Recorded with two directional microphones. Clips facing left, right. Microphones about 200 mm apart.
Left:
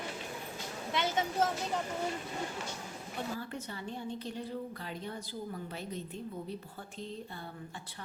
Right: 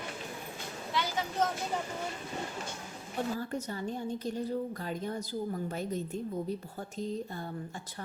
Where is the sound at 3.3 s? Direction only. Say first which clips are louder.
Right 5 dB; 40° right (ahead or behind).